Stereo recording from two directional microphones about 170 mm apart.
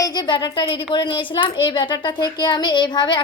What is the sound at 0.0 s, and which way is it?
Speech, 25° left (ahead or behind).